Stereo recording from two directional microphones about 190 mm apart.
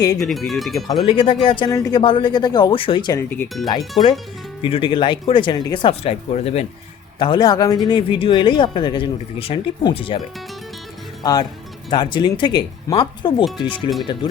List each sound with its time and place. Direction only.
0.2 s speech: centre (ahead or behind)
1.0 s speech: 25° left (ahead or behind)
3.2 s speech: 10° left (ahead or behind)
4.6 s speech: 25° left (ahead or behind)
7.2 s speech: 25° left (ahead or behind)
11.2 s speech: 20° left (ahead or behind)